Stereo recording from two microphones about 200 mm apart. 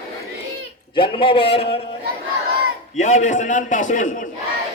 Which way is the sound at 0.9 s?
25° left (ahead or behind).